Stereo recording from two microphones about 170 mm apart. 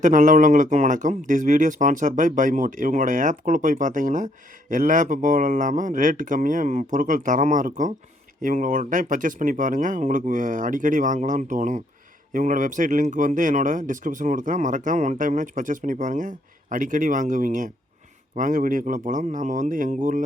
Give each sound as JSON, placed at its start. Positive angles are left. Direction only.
{"t": 0.0, "sound": "speech", "side_deg": -50}